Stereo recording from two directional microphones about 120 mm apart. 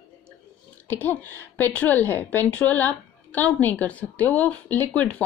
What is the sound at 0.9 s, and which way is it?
A woman's voice, 15° left (ahead or behind).